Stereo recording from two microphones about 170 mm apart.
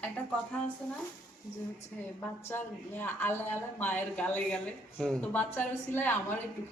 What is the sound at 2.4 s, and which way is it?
Speech, 10° left (ahead or behind).